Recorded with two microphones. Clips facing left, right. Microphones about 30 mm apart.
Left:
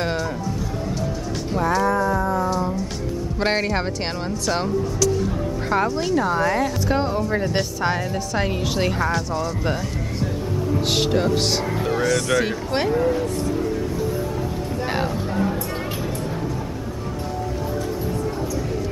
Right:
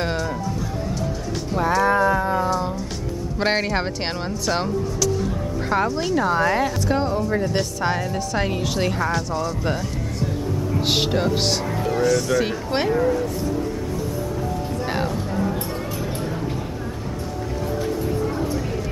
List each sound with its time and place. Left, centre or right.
0.0 s music: centre
1.8 s music: right
3.3 s a woman's voice: centre
5.2 s speech: centre
6.9 s a woman's voice: centre
10.7 s a woman's voice: centre
14.9 s speech: centre